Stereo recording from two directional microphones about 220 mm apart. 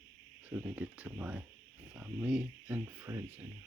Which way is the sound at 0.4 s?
10° right (ahead or behind).